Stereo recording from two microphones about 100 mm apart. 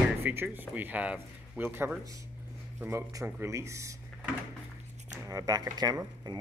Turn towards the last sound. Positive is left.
turn(degrees=-40)  # may be behind; listen again after turning